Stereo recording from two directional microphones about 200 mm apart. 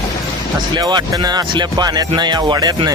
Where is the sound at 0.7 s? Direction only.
20° right (ahead or behind).